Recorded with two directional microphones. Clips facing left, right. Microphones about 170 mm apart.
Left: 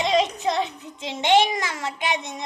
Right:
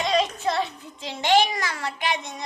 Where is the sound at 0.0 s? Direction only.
20° left (ahead or behind).